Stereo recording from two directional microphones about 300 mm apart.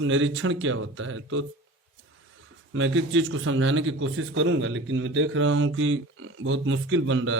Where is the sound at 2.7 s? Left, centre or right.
Right.